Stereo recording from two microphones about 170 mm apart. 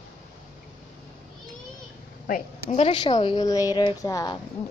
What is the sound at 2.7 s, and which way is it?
Speech, 35° left (ahead or behind).